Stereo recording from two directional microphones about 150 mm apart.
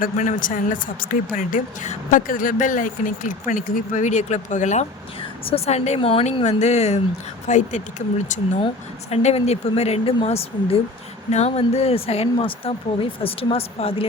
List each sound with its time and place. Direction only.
0.0 s a woman's voice: 60° left (ahead or behind); by 14.1 s 40° left (ahead or behind)